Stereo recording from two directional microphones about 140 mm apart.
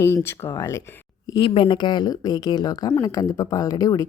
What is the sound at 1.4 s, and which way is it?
A woman's voice, 40° left (ahead or behind).